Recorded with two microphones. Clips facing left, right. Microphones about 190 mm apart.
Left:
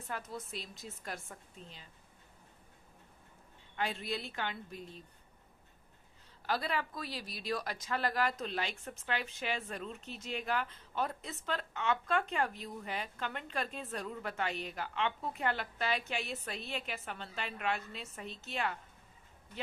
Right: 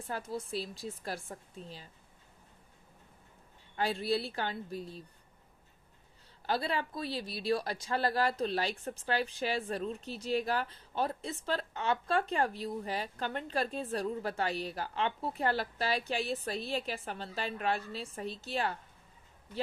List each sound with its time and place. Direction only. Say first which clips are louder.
0.1 s speech: right 5 dB; 30° right (ahead or behind)
3.8 s speech: right 6 dB; 35° right (ahead or behind)
6.4 s speech: right 2 dB; 30° right (ahead or behind)